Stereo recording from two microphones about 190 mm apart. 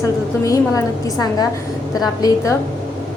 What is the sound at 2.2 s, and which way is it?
Speech, 20° left (ahead or behind).